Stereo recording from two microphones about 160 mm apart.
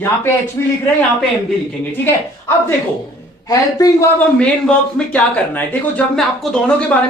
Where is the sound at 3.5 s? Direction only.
20° left (ahead or behind).